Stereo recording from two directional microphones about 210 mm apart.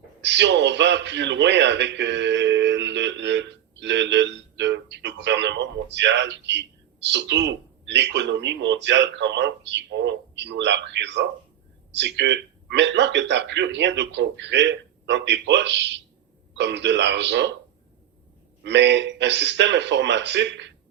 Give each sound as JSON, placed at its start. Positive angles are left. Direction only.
{"t": 0.2, "sound": "a man's voice", "side_deg": -55}
{"t": 18.6, "sound": "a man's voice", "side_deg": -55}